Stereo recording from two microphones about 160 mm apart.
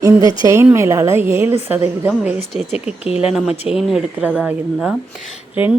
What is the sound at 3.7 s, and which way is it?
Speech, 5° right (ahead or behind).